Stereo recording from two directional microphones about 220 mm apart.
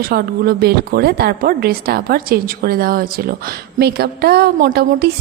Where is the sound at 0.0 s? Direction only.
45° right (ahead or behind).